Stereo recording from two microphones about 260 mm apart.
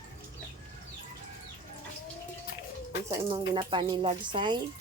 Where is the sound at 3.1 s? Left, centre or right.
Centre.